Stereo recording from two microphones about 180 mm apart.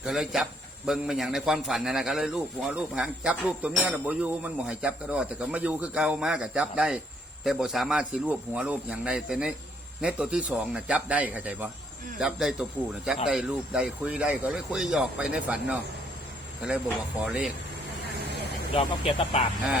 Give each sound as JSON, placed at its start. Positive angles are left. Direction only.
{"t": 0.0, "sound": "a man's voice", "side_deg": 0}
{"t": 17.2, "sound": "a man's voice", "side_deg": 0}
{"t": 18.7, "sound": "speech", "side_deg": 30}